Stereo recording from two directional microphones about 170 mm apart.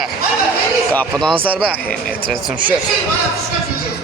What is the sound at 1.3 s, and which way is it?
Speech, 30° right (ahead or behind).